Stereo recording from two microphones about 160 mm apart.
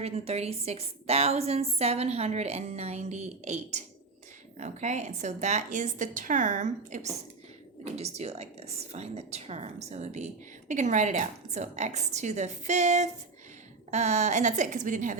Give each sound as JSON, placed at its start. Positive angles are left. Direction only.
{"t": 0.0, "sound": "a woman's voice", "side_deg": -40}